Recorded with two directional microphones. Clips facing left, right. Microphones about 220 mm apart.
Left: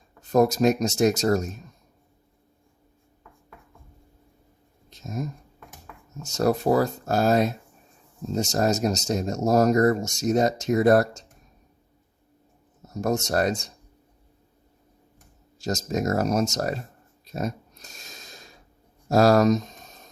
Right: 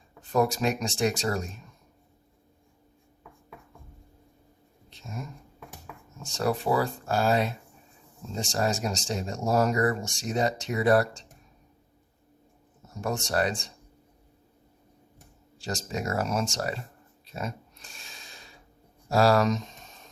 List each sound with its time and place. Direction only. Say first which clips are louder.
0.2 s speech: left 6 dB; 40° left (ahead or behind)
4.9 s a sound: left 8 dB; 40° left (ahead or behind)
6.2 s speech: left 5 dB; 40° left (ahead or behind)
12.9 s speech: left 5 dB; 40° left (ahead or behind)
15.5 s speech: left 6 dB; 40° left (ahead or behind)
17.2 s a sound: left 6 dB; 40° left (ahead or behind)